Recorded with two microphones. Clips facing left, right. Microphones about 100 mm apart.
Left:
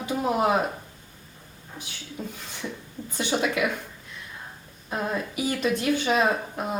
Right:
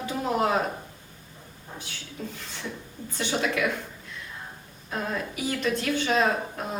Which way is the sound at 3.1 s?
15° left (ahead or behind).